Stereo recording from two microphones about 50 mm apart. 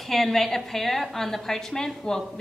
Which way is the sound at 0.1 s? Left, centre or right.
Centre.